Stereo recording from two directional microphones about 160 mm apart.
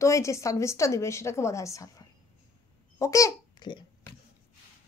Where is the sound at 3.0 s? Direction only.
20° left (ahead or behind).